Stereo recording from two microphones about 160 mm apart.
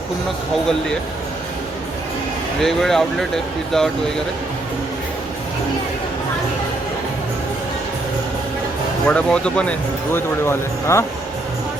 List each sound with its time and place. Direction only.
2.6 s speech: centre (ahead or behind)
9.0 s speech: 5° left (ahead or behind)